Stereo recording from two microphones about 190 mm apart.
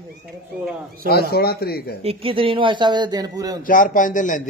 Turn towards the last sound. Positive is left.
turn(degrees=45)  # may be behind; listen again after turning